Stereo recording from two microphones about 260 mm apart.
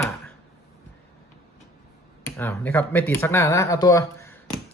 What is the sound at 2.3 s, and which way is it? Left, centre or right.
Speech, centre.